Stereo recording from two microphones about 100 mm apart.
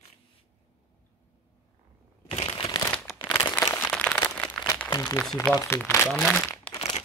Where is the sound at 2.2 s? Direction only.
70° left (ahead or behind).